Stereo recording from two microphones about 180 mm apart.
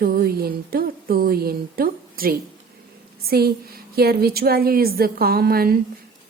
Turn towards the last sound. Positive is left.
turn(degrees=-55)  # may be behind; listen again after turning